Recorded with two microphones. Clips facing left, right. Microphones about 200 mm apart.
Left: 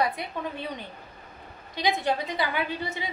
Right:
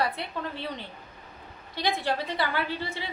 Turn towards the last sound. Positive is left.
turn(degrees=20)  # may be behind; listen again after turning